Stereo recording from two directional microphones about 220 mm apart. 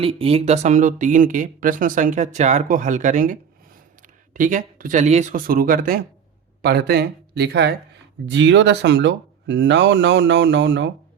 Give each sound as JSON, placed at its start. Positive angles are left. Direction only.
{"t": 0.0, "sound": "speech", "side_deg": -25}
{"t": 4.4, "sound": "speech", "side_deg": -35}